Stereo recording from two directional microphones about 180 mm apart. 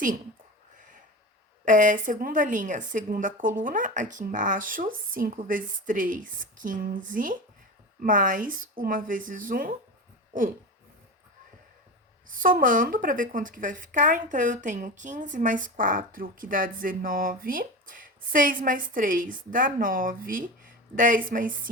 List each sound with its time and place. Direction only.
1.6 s speech: 45° right (ahead or behind)
10.3 s a sound: 50° right (ahead or behind)
12.3 s speech: 50° right (ahead or behind)